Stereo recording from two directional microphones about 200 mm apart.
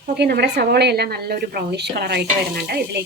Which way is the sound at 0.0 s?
50° right (ahead or behind).